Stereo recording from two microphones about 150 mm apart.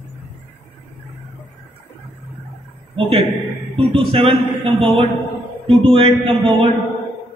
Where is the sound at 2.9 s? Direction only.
35° right (ahead or behind).